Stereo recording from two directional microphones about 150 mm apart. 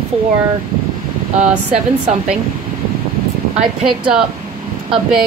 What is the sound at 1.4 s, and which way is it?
Speech, 5° right (ahead or behind).